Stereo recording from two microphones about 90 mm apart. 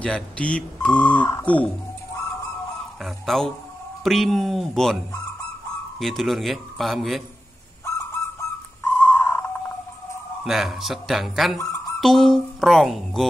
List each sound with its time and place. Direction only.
0.0 s speech: 10° left (ahead or behind)
3.0 s a man's voice: 5° left (ahead or behind)
5.9 s a man's voice: centre (ahead or behind)
7.8 s goose: 30° left (ahead or behind)
9.2 s a sound: 25° left (ahead or behind)
10.4 s a man's voice: 5° right (ahead or behind)
11.5 s music: 35° left (ahead or behind)
12.0 s a man's voice: 5° left (ahead or behind)